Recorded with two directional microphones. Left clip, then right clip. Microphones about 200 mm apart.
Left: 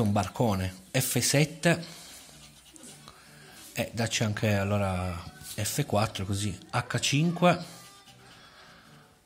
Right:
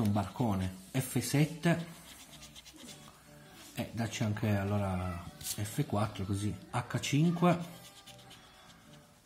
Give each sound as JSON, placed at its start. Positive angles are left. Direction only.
{"t": 0.1, "sound": "speech", "side_deg": 30}
{"t": 3.7, "sound": "speech", "side_deg": 25}